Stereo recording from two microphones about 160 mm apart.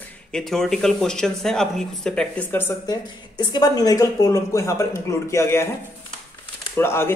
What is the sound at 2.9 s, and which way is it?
Speech, 25° left (ahead or behind).